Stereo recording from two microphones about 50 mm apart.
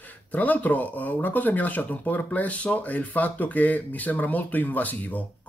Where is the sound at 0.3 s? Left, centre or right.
Left.